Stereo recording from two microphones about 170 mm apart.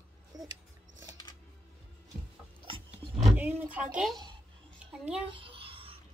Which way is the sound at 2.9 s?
10° right (ahead or behind).